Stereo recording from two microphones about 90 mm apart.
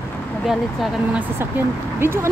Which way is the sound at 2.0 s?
25° right (ahead or behind).